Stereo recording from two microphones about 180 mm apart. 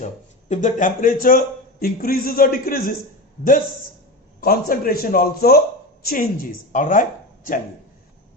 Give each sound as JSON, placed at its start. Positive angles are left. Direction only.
{"t": 0.0, "sound": "a man's voice", "side_deg": 40}
{"t": 4.4, "sound": "a man's voice", "side_deg": 55}